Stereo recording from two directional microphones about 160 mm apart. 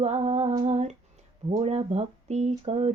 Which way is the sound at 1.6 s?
40° right (ahead or behind).